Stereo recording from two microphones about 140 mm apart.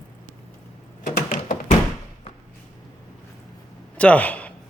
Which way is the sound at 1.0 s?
85° left.